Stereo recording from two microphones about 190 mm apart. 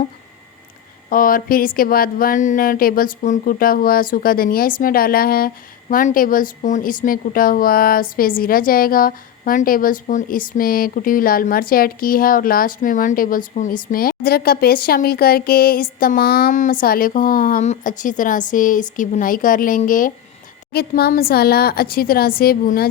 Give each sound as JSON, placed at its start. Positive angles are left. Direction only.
{"t": 1.1, "sound": "a woman's voice", "side_deg": 50}
{"t": 20.7, "sound": "a woman's voice", "side_deg": 55}